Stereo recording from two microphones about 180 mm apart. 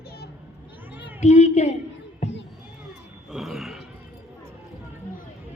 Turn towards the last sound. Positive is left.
turn(degrees=0)  # may be behind; listen again after turning